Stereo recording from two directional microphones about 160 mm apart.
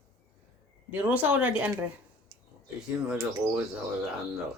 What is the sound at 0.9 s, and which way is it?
Speech, 10° right (ahead or behind).